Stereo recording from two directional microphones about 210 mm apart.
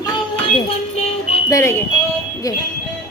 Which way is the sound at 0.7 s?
30° left (ahead or behind).